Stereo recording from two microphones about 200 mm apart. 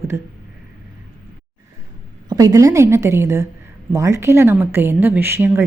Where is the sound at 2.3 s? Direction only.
15° right (ahead or behind).